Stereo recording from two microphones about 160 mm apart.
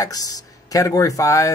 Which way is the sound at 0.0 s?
20° left (ahead or behind).